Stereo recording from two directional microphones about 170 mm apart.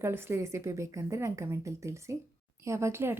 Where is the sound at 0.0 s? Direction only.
15° right (ahead or behind).